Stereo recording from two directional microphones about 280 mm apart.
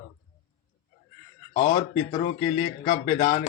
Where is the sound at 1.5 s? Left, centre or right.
Left.